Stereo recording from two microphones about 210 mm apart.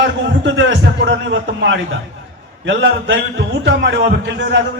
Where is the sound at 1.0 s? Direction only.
65° right (ahead or behind).